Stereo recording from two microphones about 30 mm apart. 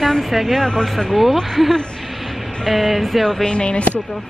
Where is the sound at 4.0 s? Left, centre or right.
Centre.